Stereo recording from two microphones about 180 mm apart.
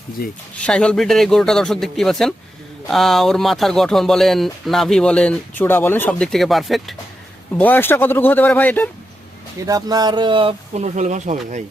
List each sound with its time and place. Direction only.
0.2 s speech: 55° left (ahead or behind)
0.6 s speech: 5° left (ahead or behind)
7.6 s speech: 10° left (ahead or behind)
9.6 s speech: 20° right (ahead or behind); by 11.6 s 40° right (ahead or behind)